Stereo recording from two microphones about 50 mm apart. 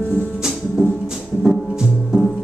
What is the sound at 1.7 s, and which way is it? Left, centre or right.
Music, centre.